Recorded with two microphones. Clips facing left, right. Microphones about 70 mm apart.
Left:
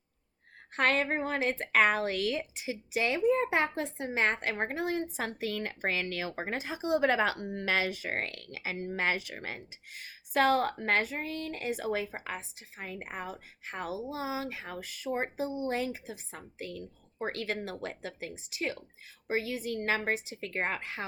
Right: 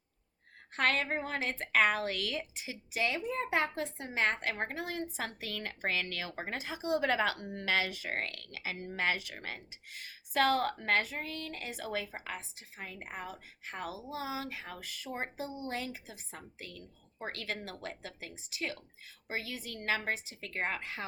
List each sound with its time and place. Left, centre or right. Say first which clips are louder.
0.7 s a woman's voice: left 3 dB; left